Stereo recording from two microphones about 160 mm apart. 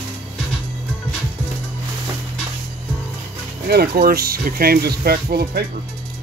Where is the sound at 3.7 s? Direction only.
70° right (ahead or behind).